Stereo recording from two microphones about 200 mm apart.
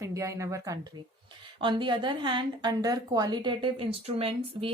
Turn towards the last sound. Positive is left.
turn(degrees=-25)  # may be behind; listen again after turning